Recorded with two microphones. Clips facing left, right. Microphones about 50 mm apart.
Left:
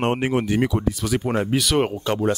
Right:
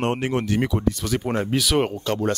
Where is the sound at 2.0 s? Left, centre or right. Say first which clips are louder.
Left 2 dB; centre.